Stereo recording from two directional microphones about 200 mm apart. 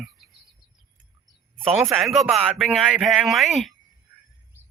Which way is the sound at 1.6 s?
10° right (ahead or behind).